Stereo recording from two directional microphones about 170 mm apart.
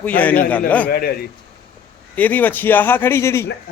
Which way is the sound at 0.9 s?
65° left (ahead or behind).